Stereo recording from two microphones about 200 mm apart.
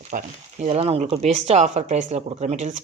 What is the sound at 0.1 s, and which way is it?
Speech, 40° right (ahead or behind).